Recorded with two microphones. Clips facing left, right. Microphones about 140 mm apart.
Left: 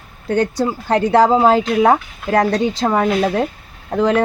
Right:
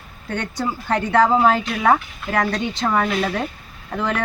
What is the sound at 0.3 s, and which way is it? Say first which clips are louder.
Speech: left 8 dB; 35° left (ahead or behind).